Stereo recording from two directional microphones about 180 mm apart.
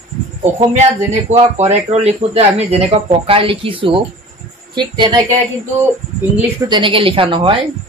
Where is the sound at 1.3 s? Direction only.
35° right (ahead or behind).